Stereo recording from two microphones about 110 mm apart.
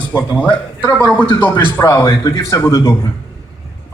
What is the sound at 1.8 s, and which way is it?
A man's voice, 30° left (ahead or behind).